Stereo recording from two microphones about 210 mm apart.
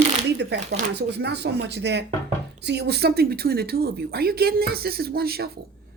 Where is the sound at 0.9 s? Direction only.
55° right (ahead or behind).